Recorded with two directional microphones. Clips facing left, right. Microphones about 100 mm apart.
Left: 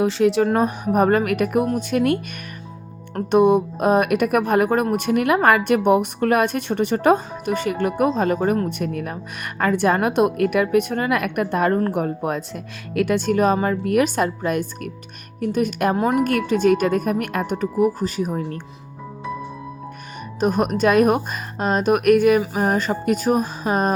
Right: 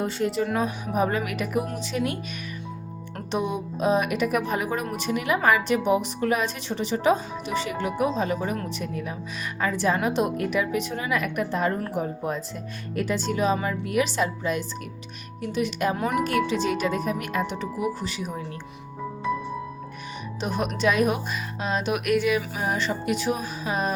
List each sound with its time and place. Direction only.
0.0 s speech: 90° left
0.4 s speech: 50° left (ahead or behind)
3.2 s speech: 55° left (ahead or behind)
16.0 s speech: 35° left (ahead or behind)
16.2 s speech: 50° left (ahead or behind)
20.4 s speech: 45° left (ahead or behind)